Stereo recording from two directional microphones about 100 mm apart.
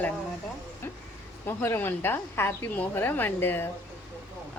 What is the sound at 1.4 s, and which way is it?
A woman's voice, 20° left (ahead or behind).